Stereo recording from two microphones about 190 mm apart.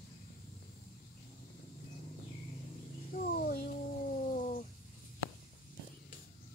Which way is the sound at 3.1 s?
50° left (ahead or behind).